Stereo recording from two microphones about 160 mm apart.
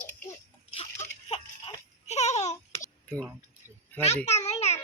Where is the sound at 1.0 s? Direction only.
40° left (ahead or behind).